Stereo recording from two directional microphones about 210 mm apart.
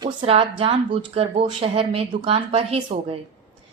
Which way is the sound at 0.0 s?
25° right (ahead or behind).